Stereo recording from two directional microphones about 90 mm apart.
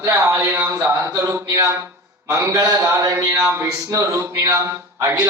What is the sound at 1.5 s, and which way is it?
A man's voice, 35° right (ahead or behind).